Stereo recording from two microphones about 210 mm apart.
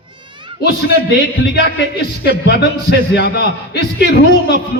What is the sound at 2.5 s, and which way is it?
A man's voice, 50° left (ahead or behind).